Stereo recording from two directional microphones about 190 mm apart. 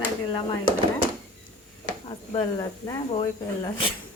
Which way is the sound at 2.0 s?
25° left (ahead or behind).